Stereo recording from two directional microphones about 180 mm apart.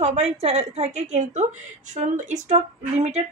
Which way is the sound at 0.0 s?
35° right (ahead or behind).